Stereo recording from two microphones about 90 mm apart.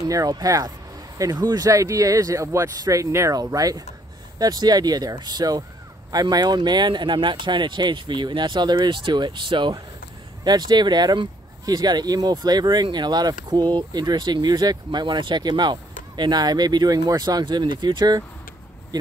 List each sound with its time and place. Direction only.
0.0 s speech: 45° right (ahead or behind); by 9.8 s 60° right (ahead or behind)
10.4 s speech: 50° right (ahead or behind)